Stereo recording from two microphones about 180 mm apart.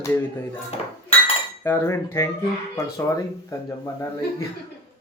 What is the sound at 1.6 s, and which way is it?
Speech, 15° left (ahead or behind).